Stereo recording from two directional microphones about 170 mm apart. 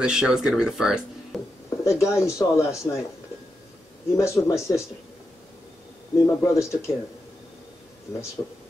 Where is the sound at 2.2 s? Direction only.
15° left (ahead or behind).